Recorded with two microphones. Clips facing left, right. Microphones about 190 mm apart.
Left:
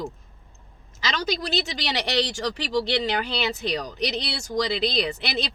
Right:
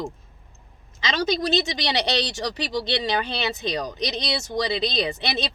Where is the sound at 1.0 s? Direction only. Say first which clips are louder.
Right 4 dB; 20° right (ahead or behind).